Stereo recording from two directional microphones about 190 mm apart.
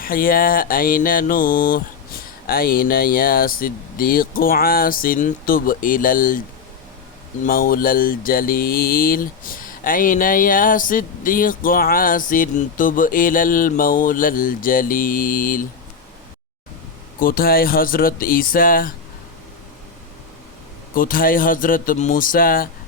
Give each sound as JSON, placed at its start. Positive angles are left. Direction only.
{"t": 0.0, "sound": "mantra", "side_deg": 50}
{"t": 7.4, "sound": "mantra", "side_deg": 50}
{"t": 17.2, "sound": "mantra", "side_deg": 50}
{"t": 20.9, "sound": "mantra", "side_deg": 45}